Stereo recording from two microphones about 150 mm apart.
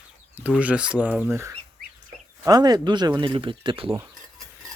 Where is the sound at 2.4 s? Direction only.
25° right (ahead or behind).